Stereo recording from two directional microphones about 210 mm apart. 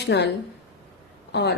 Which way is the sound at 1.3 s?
50° left (ahead or behind).